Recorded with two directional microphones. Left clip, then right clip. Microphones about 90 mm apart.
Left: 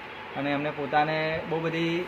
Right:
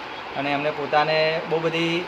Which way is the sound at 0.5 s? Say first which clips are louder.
Right 5 dB; 55° left (ahead or behind).